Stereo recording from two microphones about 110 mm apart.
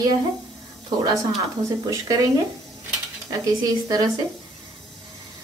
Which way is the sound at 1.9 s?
30° right (ahead or behind).